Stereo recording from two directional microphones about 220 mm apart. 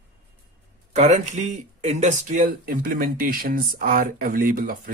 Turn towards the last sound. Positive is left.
turn(degrees=-40)  # may be behind; listen again after turning